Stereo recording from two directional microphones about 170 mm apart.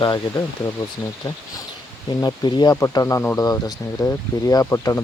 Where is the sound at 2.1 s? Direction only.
25° left (ahead or behind).